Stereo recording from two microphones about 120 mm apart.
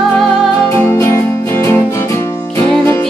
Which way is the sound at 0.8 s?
20° left (ahead or behind).